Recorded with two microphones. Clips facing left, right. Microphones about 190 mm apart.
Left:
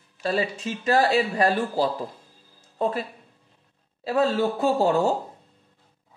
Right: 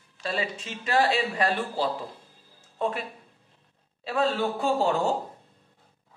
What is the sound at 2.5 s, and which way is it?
Music, 40° left (ahead or behind).